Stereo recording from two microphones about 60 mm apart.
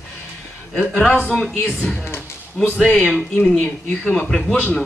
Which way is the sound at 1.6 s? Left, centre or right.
Centre.